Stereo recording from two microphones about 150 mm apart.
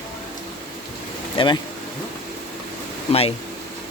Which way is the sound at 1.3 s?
30° left (ahead or behind).